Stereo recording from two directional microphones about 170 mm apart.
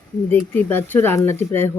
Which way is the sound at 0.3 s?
10° left (ahead or behind).